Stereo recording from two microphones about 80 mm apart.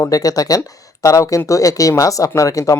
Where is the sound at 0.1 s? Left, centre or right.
Left.